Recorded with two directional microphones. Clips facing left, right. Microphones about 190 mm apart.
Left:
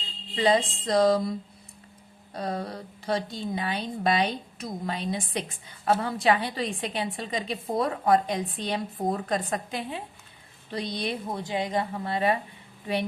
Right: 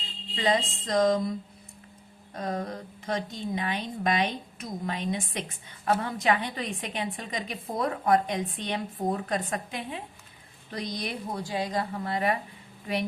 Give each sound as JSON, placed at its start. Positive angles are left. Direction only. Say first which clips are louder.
{"t": 0.3, "sound": "a woman's voice", "louder": "left 3 dB", "side_deg": 30}
{"t": 2.3, "sound": "a woman's voice", "louder": "even", "side_deg": 35}